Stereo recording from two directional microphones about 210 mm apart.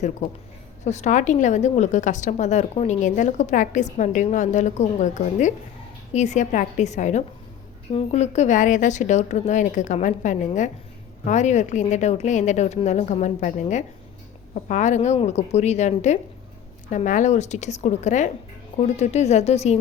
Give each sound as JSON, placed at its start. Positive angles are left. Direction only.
{"t": 0.9, "sound": "a woman's voice", "side_deg": 35}